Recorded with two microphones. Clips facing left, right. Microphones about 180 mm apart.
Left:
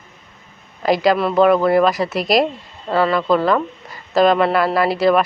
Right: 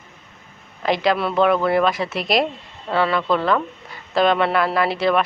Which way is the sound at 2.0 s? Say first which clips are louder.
Left 4 dB; 40° left (ahead or behind).